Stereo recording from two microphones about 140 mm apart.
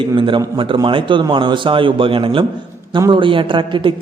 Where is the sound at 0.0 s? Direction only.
35° right (ahead or behind).